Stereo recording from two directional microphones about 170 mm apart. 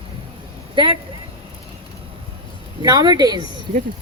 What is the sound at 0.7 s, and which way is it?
Speech, 30° right (ahead or behind).